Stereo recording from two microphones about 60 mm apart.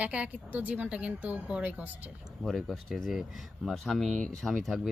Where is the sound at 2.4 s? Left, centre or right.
Centre.